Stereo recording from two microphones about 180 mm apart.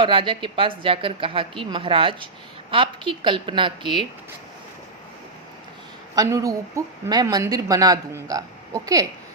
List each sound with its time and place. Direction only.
0.0 s a woman's voice: 30° right (ahead or behind)
6.1 s a woman's voice: 20° right (ahead or behind)